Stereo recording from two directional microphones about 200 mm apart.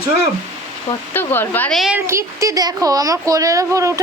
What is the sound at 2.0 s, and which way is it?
A child's voice, 15° right (ahead or behind).